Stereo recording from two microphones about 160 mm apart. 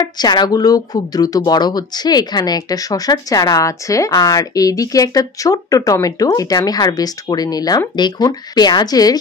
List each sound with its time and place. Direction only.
0.0 s speech: 25° left (ahead or behind)